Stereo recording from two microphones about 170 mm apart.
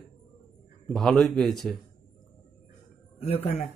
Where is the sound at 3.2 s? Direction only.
35° left (ahead or behind).